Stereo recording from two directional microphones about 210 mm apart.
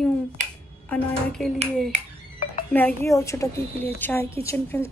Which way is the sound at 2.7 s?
10° left (ahead or behind).